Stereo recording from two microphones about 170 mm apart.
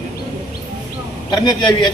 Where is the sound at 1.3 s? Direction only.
25° left (ahead or behind).